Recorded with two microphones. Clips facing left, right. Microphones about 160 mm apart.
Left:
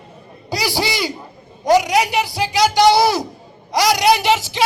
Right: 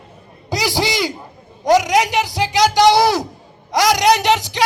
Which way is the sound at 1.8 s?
90° right.